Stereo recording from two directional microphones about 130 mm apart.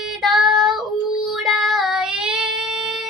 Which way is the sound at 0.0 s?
Centre (ahead or behind).